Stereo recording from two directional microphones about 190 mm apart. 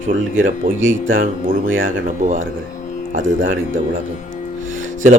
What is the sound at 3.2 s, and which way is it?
Speech, 45° right (ahead or behind).